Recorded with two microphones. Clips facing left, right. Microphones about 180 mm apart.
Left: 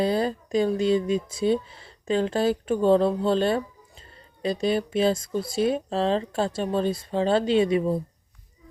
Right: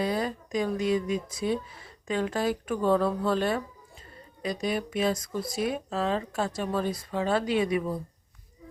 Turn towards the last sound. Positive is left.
turn(degrees=25)  # may be behind; listen again after turning